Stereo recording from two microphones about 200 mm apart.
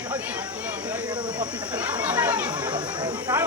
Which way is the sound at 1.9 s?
5° right (ahead or behind).